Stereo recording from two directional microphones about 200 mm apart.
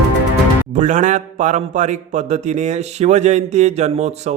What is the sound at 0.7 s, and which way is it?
Speech, 35° right (ahead or behind).